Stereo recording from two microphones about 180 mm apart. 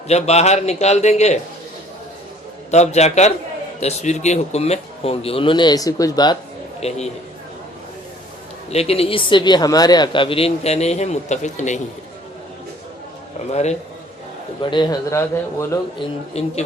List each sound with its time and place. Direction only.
0.1 s speech: 35° left (ahead or behind)
2.6 s speech: 40° left (ahead or behind); by 6.3 s 20° left (ahead or behind)
6.7 s a man's voice: 35° left (ahead or behind)
8.7 s speech: 35° left (ahead or behind)
13.5 s speech: 40° left (ahead or behind)
14.6 s a man's voice: 25° left (ahead or behind)
16.4 s speech: 35° left (ahead or behind)